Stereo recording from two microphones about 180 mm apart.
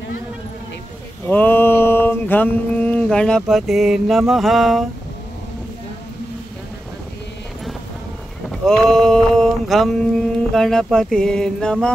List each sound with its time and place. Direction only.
1.3 s mantra: 10° left (ahead or behind)
8.5 s mantra: 5° left (ahead or behind)